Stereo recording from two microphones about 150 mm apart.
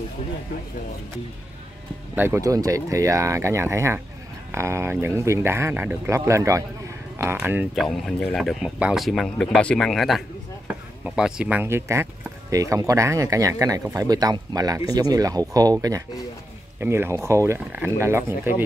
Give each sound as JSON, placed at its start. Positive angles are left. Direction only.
{"t": 2.1, "sound": "speech", "side_deg": -15}
{"t": 7.7, "sound": "speech", "side_deg": 0}